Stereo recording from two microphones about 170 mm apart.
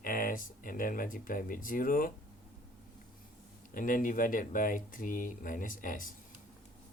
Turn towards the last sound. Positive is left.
turn(degrees=55)  # may be behind; listen again after turning